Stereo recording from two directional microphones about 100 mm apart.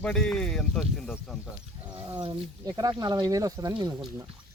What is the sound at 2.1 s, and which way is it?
Speech, 55° right (ahead or behind).